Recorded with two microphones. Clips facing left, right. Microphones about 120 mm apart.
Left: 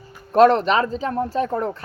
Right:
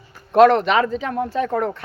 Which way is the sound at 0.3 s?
35° left (ahead or behind).